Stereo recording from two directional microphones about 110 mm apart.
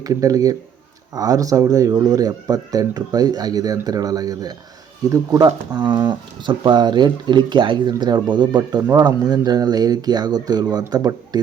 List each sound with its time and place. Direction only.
0.0 s speech: 30° right (ahead or behind)